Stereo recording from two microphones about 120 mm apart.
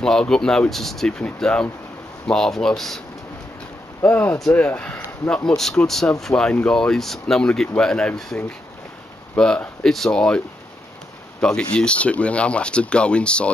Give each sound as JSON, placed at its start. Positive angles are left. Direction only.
{"t": 0.0, "sound": "speech", "side_deg": 5}
{"t": 4.0, "sound": "speech", "side_deg": 20}
{"t": 4.4, "sound": "speech", "side_deg": 5}
{"t": 11.4, "sound": "speech", "side_deg": 5}